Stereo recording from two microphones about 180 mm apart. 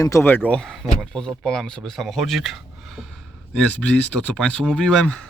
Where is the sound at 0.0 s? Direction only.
15° left (ahead or behind).